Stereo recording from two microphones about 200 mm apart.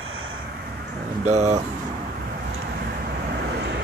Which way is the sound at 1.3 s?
35° right (ahead or behind).